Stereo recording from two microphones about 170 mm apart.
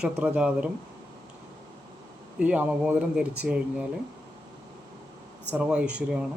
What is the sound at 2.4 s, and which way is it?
Speech, 5° right (ahead or behind).